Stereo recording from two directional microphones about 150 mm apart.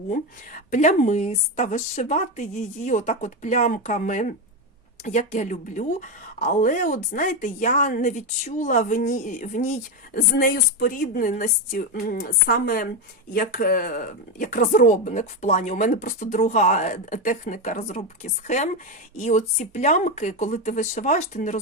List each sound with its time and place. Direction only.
0.1 s speech: 65° left (ahead or behind); by 1.7 s 45° left (ahead or behind)
1.7 s speech: 60° left (ahead or behind)
10.2 s a woman's voice: 70° left (ahead or behind); by 21.6 s 55° left (ahead or behind)